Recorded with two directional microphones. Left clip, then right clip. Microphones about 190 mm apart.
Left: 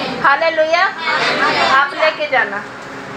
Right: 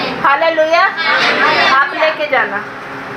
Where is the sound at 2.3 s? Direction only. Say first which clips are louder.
Right 2 dB; 20° right (ahead or behind).